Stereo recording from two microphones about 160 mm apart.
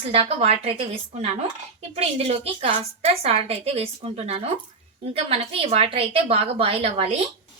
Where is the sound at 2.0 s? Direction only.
40° right (ahead or behind).